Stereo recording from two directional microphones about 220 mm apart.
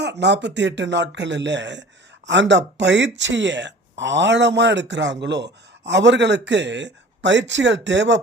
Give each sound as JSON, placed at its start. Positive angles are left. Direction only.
{"t": 0.0, "sound": "speech", "side_deg": -50}